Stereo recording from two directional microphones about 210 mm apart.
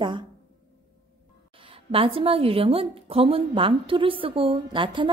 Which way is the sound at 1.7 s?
25° right (ahead or behind).